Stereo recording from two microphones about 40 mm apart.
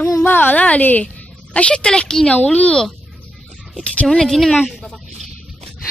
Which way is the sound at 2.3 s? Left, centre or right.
Left.